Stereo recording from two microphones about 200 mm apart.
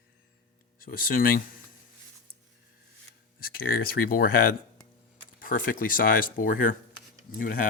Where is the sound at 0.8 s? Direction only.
45° left (ahead or behind).